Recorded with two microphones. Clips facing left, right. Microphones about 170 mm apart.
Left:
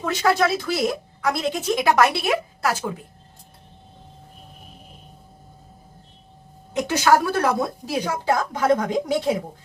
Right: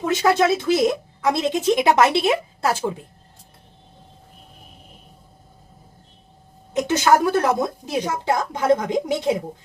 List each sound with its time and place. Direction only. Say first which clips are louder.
0.0 s a woman's voice: right 2 dB; 20° right (ahead or behind)
6.7 s a woman's voice: right 1 dB; 20° right (ahead or behind)